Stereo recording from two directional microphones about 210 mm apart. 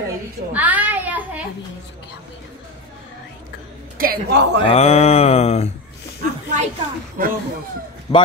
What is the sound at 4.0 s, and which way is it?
Speech, 50° right (ahead or behind).